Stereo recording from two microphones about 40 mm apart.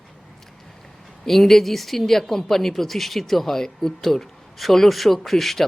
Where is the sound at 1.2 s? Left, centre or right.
Centre.